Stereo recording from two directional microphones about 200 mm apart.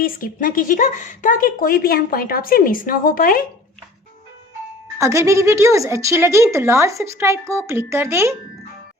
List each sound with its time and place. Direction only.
0.0 s speech: 45° left (ahead or behind)
4.9 s a woman's voice: 15° right (ahead or behind)